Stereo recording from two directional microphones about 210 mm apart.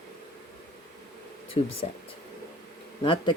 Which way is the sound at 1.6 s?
25° left (ahead or behind).